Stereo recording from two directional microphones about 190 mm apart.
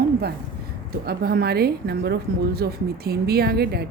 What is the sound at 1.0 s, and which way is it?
Speech, 55° right (ahead or behind).